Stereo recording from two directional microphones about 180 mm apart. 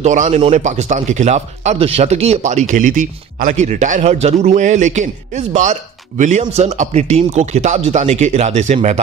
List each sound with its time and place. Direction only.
0.0 s speech: 40° right (ahead or behind)